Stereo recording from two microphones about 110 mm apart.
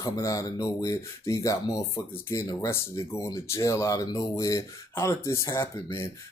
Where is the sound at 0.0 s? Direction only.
35° left (ahead or behind).